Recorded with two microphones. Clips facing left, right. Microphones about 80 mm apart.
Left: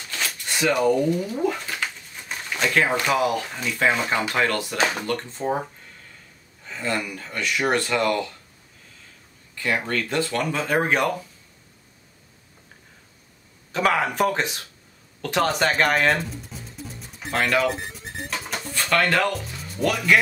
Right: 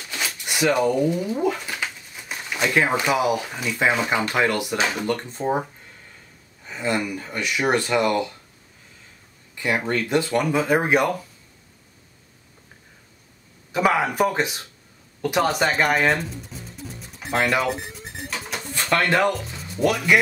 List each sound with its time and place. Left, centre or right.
0.1 s a sound: centre
1.4 s speech: centre
6.6 s a sound: centre
7.2 s speech: centre
9.6 s speech: centre
13.7 s speech: centre
17.3 s speech: centre
18.9 s speech: right